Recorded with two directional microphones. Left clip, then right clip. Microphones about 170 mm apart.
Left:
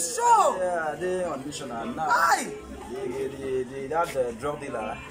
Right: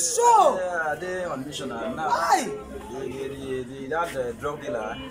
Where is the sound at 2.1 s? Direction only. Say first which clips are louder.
Even; 20° right (ahead or behind).